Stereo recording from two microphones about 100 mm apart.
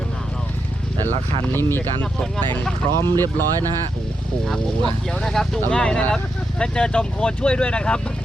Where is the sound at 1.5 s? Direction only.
20° left (ahead or behind).